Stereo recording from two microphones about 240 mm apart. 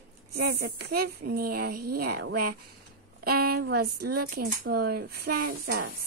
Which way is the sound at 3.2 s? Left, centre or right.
Right.